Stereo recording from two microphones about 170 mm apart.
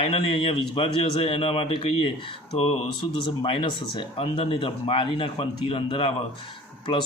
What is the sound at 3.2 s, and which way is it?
A man's voice, 30° left (ahead or behind).